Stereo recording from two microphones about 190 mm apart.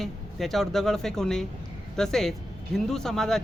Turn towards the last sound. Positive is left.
turn(degrees=5)  # may be behind; listen again after turning